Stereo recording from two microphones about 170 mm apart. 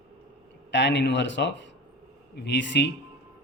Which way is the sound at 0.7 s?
90° left.